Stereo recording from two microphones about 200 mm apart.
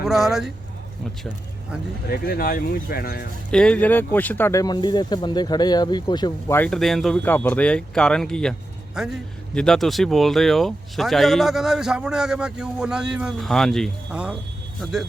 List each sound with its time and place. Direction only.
0.0 s speech: centre (ahead or behind)
2.0 s speech: 50° left (ahead or behind)
3.5 s speech: 5° left (ahead or behind); by 6.6 s 20° left (ahead or behind)
6.6 s speech: centre (ahead or behind)
9.6 s speech: centre (ahead or behind)